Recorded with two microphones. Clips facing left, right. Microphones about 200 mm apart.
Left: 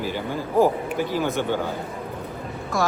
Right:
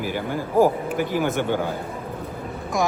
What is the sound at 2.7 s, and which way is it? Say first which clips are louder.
Speech: right 1 dB; 15° right (ahead or behind).